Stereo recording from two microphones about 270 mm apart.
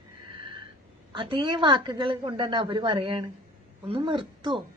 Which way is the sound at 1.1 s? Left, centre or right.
Centre.